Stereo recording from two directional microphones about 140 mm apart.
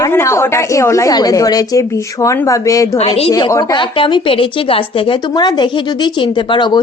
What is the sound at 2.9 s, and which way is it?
Speech, 45° left (ahead or behind).